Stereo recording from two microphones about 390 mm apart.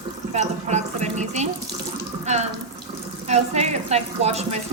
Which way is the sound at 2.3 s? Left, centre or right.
Centre.